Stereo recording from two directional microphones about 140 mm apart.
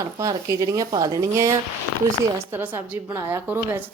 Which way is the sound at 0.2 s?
25° right (ahead or behind).